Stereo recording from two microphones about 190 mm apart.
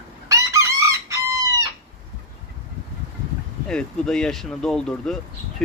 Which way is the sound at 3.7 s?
5° left (ahead or behind).